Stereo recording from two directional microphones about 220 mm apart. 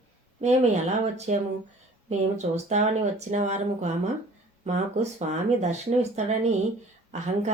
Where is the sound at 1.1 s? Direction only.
30° right (ahead or behind).